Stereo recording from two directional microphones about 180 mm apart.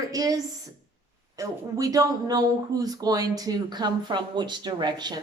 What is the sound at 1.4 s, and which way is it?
Speech, 20° right (ahead or behind).